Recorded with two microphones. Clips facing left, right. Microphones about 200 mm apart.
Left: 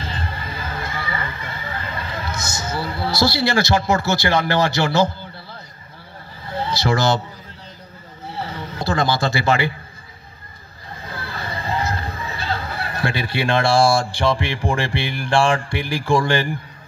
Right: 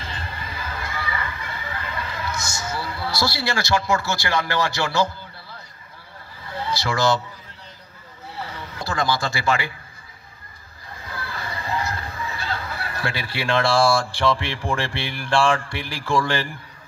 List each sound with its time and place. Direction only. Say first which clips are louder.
0.0 s music: left 5 dB; 40° left (ahead or behind)
1.5 s a sound: left 2 dB; 40° left (ahead or behind)
2.3 s a man's voice: left 3 dB; 20° left (ahead or behind)
6.4 s vehicle: left 5 dB; 40° left (ahead or behind)
6.7 s speech: left 2 dB; 25° left (ahead or behind)
8.4 s a sound: left 5 dB; 40° left (ahead or behind)
8.7 s speech: left 4 dB; 25° left (ahead or behind)
11.1 s music: left 2 dB; 30° left (ahead or behind)
12.5 s speech: left 3 dB; 30° left (ahead or behind)